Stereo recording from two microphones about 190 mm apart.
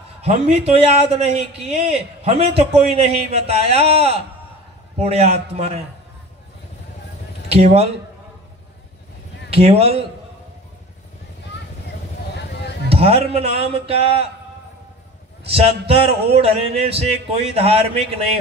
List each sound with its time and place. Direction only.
0.2 s a man's voice: 35° right (ahead or behind)
7.4 s speech: 35° right (ahead or behind)
9.5 s a man's voice: 30° right (ahead or behind)
12.4 s a sound: 60° left (ahead or behind)
12.9 s a man's voice: 30° right (ahead or behind)
15.4 s a man's voice: 30° right (ahead or behind)